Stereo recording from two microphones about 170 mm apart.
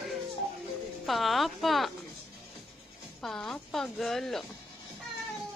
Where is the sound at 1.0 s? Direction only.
Centre (ahead or behind).